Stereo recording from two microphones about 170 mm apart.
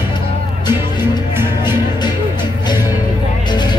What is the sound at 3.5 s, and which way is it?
Music, 25° left (ahead or behind).